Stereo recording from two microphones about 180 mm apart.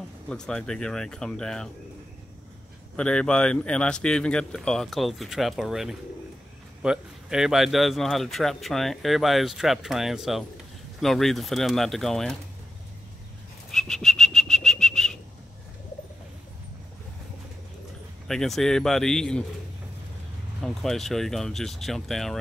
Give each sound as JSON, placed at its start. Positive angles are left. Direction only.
{"t": 0.3, "sound": "a man's voice", "side_deg": 5}
{"t": 3.0, "sound": "a man's voice", "side_deg": 5}
{"t": 13.7, "sound": "whistling", "side_deg": 0}
{"t": 18.2, "sound": "a man's voice", "side_deg": 0}
{"t": 20.6, "sound": "a man's voice", "side_deg": 0}